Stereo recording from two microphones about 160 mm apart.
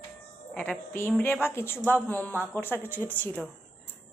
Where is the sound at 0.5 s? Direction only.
10° left (ahead or behind).